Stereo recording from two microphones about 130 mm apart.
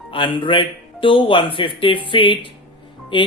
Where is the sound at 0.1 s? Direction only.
40° left (ahead or behind).